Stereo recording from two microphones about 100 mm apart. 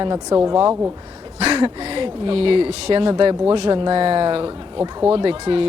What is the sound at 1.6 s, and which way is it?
Speech, 55° right (ahead or behind).